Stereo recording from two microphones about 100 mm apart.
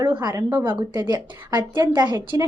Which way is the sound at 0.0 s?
45° right (ahead or behind).